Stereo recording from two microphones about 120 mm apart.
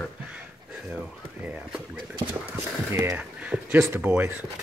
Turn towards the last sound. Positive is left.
turn(degrees=-10)  # may be behind; listen again after turning